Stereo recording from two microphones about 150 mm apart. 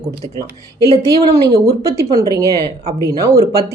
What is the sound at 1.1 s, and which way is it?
Speech, 25° right (ahead or behind).